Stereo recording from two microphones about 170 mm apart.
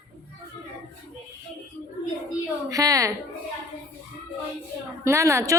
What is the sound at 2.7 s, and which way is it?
Speech, 20° right (ahead or behind).